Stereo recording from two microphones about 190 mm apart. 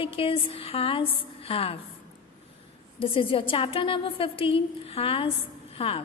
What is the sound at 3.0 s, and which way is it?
A woman's voice, 30° left (ahead or behind).